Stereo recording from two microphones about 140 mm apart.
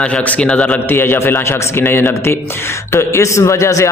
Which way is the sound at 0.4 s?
10° left (ahead or behind).